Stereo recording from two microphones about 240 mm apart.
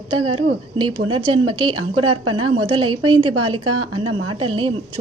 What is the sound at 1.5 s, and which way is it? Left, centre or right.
A woman's voice, right.